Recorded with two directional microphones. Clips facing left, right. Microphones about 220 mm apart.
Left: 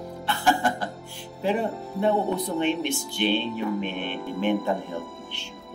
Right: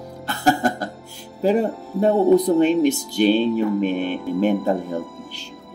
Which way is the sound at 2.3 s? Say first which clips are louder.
Right 10 dB; 40° right (ahead or behind).